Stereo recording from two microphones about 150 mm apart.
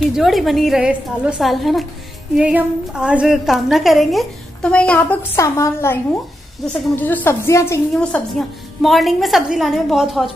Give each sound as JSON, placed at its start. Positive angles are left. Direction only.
{"t": 0.1, "sound": "a woman's voice", "side_deg": 0}
{"t": 7.9, "sound": "a woman's voice", "side_deg": 5}